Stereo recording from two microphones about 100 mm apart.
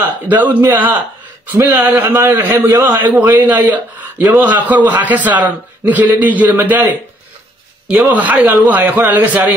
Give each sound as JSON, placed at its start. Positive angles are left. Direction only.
{"t": 0.0, "sound": "a man's voice", "side_deg": -15}
{"t": 8.0, "sound": "a man's voice", "side_deg": -15}